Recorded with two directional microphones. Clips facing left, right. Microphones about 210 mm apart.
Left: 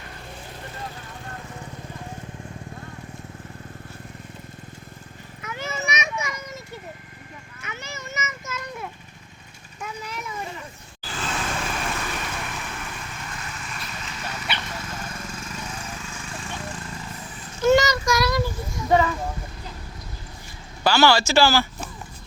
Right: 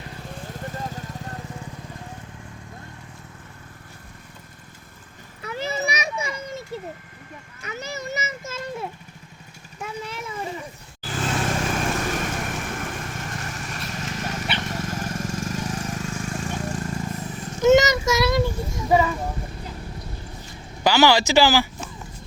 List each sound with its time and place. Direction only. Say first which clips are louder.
0.8 s vehicle: right 4 dB; 40° right (ahead or behind)
5.4 s children playing: right 4 dB; 35° right (ahead or behind)
7.6 s children playing: right 6 dB; 35° right (ahead or behind)
9.8 s vehicle: right 2 dB; 25° right (ahead or behind)
11.0 s vehicle: right 4 dB; 45° right (ahead or behind)
17.6 s child singing: right 2 dB; 20° right (ahead or behind)
18.9 s a sound: even; 5° right (ahead or behind)
20.8 s speech: right 1 dB; 15° right (ahead or behind)